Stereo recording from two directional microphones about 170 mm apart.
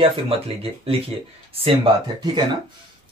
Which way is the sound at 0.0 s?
35° right (ahead or behind).